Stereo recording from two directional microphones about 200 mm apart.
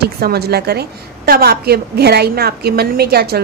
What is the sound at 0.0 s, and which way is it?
A woman's voice, 50° right (ahead or behind).